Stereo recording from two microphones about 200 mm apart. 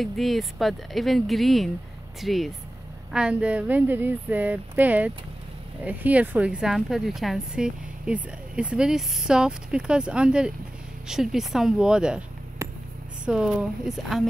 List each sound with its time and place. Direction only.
0.0 s a woman's voice: centre (ahead or behind)
12.6 s a sound: 15° right (ahead or behind)
13.2 s a woman's voice: 5° right (ahead or behind)